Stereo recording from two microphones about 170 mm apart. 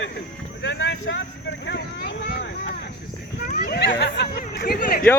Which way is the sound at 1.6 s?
90° left.